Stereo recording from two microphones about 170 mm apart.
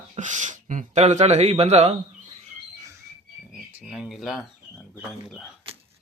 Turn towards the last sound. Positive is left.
turn(degrees=0)  # may be behind; listen again after turning